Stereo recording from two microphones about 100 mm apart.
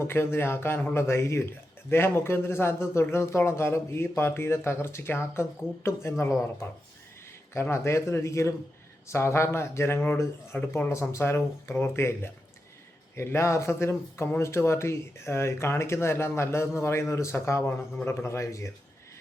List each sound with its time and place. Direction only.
0.0 s a man's voice: 25° left (ahead or behind)
7.5 s a man's voice: 25° left (ahead or behind)